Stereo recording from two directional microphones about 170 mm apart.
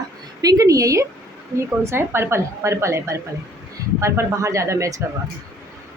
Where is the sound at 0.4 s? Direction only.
20° right (ahead or behind).